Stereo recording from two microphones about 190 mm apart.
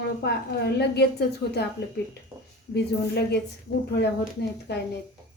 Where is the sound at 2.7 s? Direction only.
60° left (ahead or behind).